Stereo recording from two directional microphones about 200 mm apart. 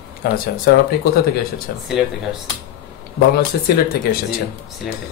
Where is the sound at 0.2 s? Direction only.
50° left (ahead or behind).